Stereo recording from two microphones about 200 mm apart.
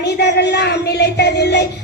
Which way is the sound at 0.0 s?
55° left (ahead or behind).